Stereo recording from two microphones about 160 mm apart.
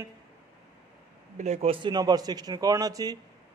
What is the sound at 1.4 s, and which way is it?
Speech, 40° right (ahead or behind).